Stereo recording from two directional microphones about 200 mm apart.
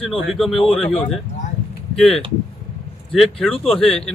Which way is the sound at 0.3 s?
Centre (ahead or behind).